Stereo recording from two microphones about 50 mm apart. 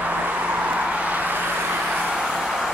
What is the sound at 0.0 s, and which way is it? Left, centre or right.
Vehicle, right.